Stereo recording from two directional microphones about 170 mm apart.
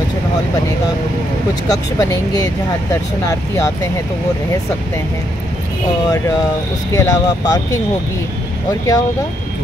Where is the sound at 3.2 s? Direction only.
20° left (ahead or behind).